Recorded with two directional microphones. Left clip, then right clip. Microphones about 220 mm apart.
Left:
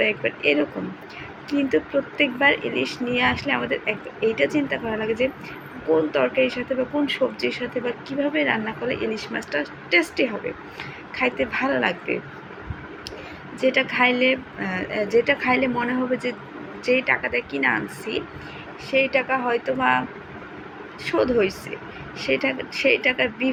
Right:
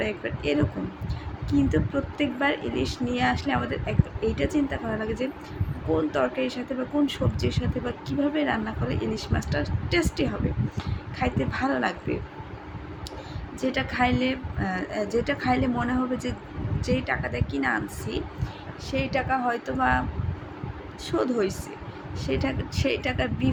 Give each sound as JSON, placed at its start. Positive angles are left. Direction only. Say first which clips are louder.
{"t": 0.0, "sound": "speech", "louder": "left 8 dB", "side_deg": -20}
{"t": 13.6, "sound": "speech", "louder": "left 6 dB", "side_deg": -20}
{"t": 21.0, "sound": "speech", "louder": "left 5 dB", "side_deg": -20}